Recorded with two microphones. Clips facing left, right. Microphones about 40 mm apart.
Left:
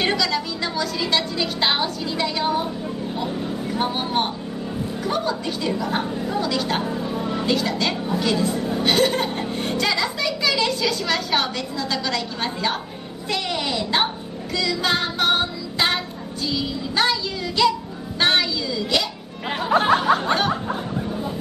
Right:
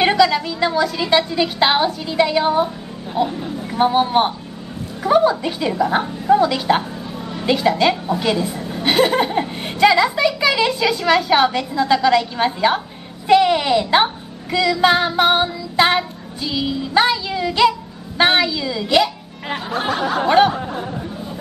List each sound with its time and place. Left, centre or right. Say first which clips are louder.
0.0 s a woman's voice: right 7 dB; centre
3.7 s a woman's voice: right 9 dB; centre
20.2 s a woman's voice: right 7 dB; centre